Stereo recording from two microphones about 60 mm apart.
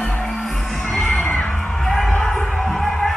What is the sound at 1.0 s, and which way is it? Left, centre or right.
Children shouting, centre.